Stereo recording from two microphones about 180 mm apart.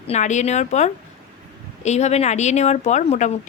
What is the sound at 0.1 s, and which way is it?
Speech, 40° left (ahead or behind).